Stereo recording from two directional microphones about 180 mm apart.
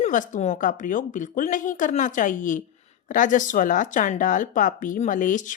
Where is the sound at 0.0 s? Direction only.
45° left (ahead or behind).